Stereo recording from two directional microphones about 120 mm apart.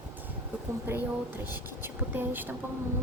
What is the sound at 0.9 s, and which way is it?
Speech, 15° right (ahead or behind).